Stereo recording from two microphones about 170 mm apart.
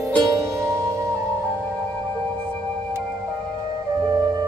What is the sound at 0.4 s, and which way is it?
Music, 15° right (ahead or behind).